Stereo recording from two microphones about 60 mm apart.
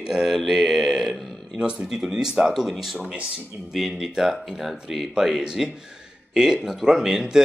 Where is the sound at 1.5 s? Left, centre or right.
Centre.